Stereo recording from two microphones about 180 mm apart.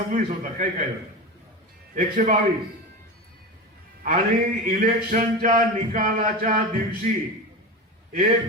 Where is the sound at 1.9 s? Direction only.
45° right (ahead or behind).